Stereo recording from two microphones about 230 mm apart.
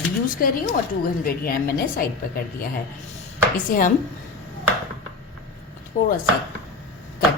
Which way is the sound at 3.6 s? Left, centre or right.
Left.